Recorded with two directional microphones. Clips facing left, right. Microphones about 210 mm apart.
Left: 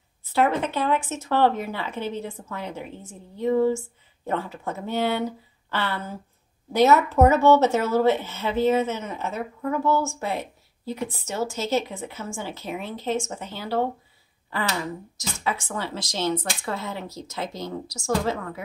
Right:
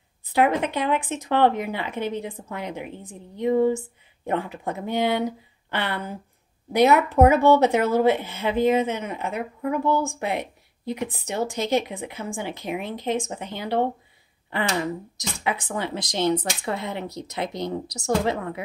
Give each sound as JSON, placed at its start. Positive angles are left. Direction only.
{"t": 0.2, "sound": "a woman's voice", "side_deg": -15}